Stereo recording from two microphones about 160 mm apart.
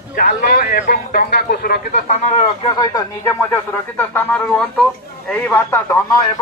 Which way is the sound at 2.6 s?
25° left (ahead or behind).